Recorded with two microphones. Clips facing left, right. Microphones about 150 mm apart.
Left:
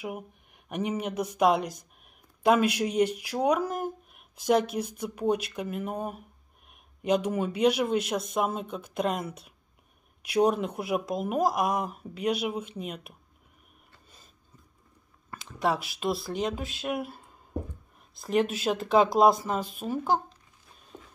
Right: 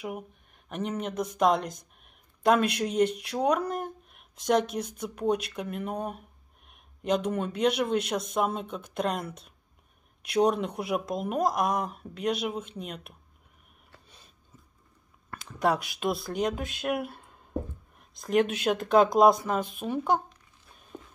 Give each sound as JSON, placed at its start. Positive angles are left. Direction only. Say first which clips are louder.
{"t": 0.7, "sound": "speech", "louder": "left 2 dB", "side_deg": 10}
{"t": 15.4, "sound": "speech", "louder": "right 1 dB", "side_deg": 0}
{"t": 20.9, "sound": "walk", "louder": "right 3 dB", "side_deg": 5}